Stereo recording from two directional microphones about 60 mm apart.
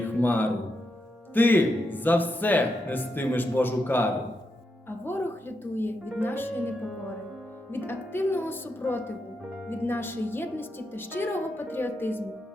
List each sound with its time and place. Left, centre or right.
0.0 s music: left
1.3 s a woman's voice: left